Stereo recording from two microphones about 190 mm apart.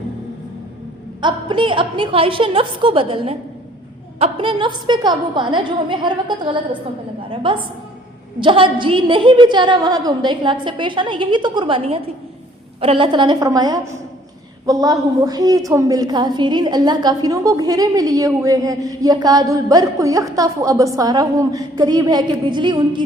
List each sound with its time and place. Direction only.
1.2 s a woman's voice: 25° right (ahead or behind)